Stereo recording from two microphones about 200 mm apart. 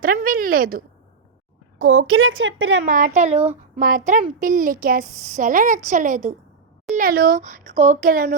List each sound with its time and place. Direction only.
0.0 s a woman's voice: 45° right (ahead or behind)
1.8 s a woman's voice: 90° right
2.8 s a woman's voice: 40° right (ahead or behind)